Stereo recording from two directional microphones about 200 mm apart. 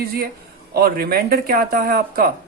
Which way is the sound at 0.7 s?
50° right (ahead or behind).